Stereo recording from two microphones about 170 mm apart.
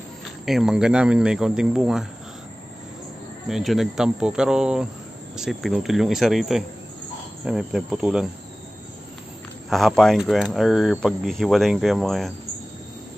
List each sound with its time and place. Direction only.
0.5 s speech: centre (ahead or behind)
3.4 s speech: centre (ahead or behind)
9.7 s speech: centre (ahead or behind)